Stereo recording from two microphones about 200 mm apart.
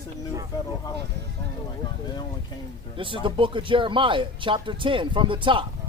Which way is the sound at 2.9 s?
25° right (ahead or behind).